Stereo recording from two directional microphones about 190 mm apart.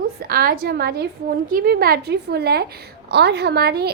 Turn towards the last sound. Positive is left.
turn(degrees=-60)  # may be behind; listen again after turning